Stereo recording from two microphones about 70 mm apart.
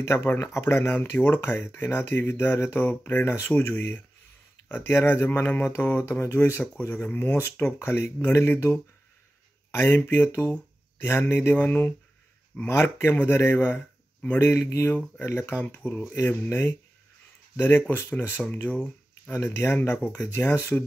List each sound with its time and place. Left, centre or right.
0.0 s speech: left
12.6 s speech: left
19.3 s speech: left